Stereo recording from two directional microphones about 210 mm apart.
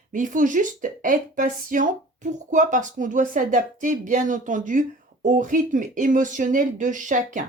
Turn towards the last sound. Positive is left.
turn(degrees=-35)  # may be behind; listen again after turning